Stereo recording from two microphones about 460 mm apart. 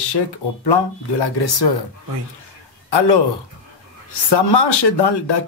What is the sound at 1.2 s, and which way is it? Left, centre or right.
Speech, left.